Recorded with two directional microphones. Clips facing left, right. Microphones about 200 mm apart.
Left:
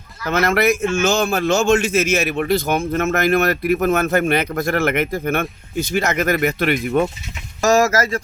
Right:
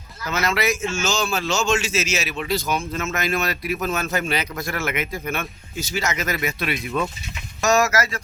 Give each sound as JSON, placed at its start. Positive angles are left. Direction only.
{"t": 0.3, "sound": "a man's voice", "side_deg": 55}